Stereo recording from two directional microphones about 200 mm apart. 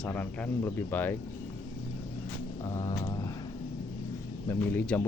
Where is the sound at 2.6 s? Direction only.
15° left (ahead or behind).